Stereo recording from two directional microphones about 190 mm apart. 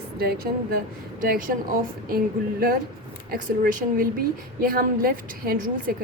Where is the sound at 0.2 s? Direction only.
55° right (ahead or behind).